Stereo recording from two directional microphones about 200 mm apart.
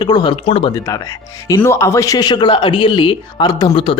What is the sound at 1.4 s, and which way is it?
Speech, 15° left (ahead or behind).